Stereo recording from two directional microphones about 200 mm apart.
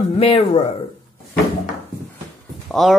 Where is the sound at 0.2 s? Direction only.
30° left (ahead or behind).